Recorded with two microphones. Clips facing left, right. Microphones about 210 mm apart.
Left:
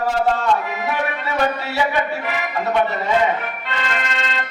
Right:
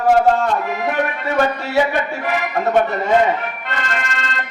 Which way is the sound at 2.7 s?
45° right (ahead or behind).